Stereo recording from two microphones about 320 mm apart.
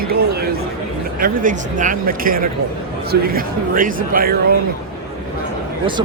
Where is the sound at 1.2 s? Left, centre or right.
Right.